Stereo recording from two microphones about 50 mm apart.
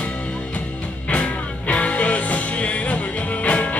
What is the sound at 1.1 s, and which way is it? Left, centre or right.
Music, left.